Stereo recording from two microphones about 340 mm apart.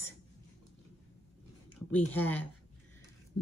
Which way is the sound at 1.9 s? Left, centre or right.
Centre.